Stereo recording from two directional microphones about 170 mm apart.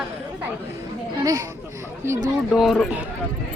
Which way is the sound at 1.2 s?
20° right (ahead or behind).